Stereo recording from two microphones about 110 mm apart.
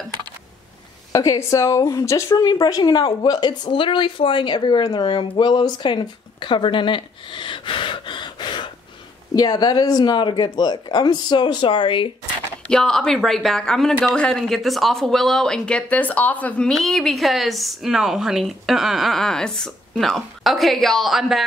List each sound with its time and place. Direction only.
1.1 s speech: 30° left (ahead or behind)
2.4 s a woman's voice: 40° left (ahead or behind)
12.6 s speech: 5° left (ahead or behind)